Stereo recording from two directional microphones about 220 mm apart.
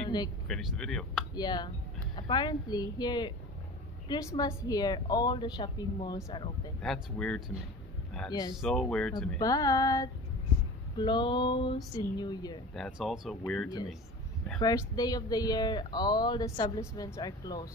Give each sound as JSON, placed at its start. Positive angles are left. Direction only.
{"t": 0.5, "sound": "speech", "side_deg": 0}
{"t": 1.3, "sound": "a woman's voice", "side_deg": 20}
{"t": 6.8, "sound": "speech", "side_deg": 5}
{"t": 8.3, "sound": "speech", "side_deg": 20}
{"t": 8.5, "sound": "speech", "side_deg": 0}
{"t": 9.4, "sound": "a woman's voice", "side_deg": 15}
{"t": 12.7, "sound": "speech", "side_deg": 0}
{"t": 14.6, "sound": "a woman's voice", "side_deg": 15}